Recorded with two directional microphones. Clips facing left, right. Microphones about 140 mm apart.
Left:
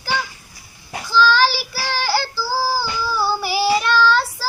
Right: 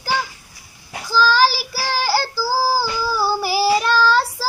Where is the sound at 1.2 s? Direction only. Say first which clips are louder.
Even; 40° right (ahead or behind).